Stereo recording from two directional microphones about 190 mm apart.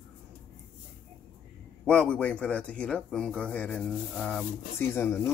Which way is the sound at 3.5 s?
5° left (ahead or behind).